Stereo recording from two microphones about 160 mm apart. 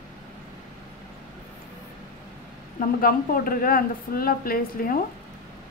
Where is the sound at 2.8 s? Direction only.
65° left (ahead or behind).